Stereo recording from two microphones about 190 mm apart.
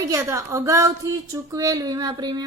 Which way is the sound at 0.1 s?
15° right (ahead or behind).